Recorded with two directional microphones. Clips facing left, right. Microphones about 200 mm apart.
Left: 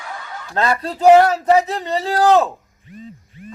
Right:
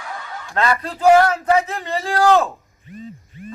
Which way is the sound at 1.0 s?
20° left (ahead or behind).